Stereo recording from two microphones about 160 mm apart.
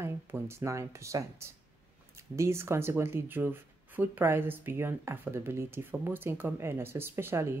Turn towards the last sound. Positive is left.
turn(degrees=-15)  # may be behind; listen again after turning